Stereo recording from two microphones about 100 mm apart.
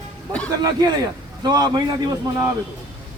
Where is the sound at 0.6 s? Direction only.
40° right (ahead or behind).